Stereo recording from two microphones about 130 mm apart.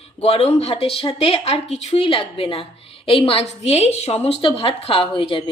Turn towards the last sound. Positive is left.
turn(degrees=45)  # may be behind; listen again after turning